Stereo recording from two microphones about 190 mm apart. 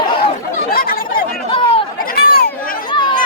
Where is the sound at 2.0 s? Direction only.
50° left (ahead or behind).